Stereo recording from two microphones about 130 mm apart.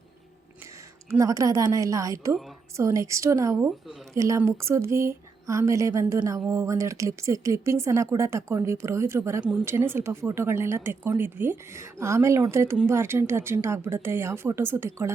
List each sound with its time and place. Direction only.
1.2 s speech: 25° right (ahead or behind)
9.4 s speech: 10° right (ahead or behind)
9.6 s speech: 20° right (ahead or behind)